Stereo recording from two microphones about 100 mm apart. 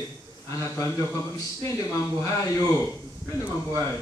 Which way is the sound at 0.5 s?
30° left (ahead or behind).